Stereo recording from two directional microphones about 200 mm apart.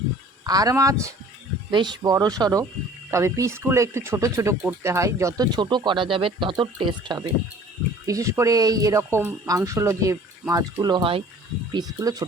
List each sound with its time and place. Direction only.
0.4 s speech: 20° right (ahead or behind)